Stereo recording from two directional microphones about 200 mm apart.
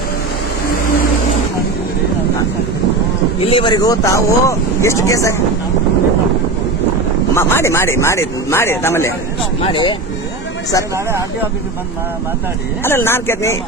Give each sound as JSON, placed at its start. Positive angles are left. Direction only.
{"t": 3.4, "sound": "speech", "side_deg": 25}
{"t": 7.3, "sound": "speech", "side_deg": 15}
{"t": 9.6, "sound": "speech", "side_deg": 25}
{"t": 10.9, "sound": "speech", "side_deg": -10}
{"t": 12.8, "sound": "speech", "side_deg": 10}